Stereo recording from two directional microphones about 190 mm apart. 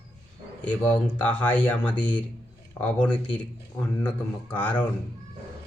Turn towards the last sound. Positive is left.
turn(degrees=10)  # may be behind; listen again after turning